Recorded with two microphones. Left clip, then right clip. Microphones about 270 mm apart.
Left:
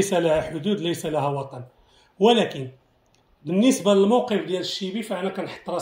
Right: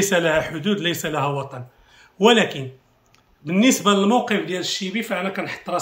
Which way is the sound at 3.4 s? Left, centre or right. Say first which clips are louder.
Right 2 dB; right.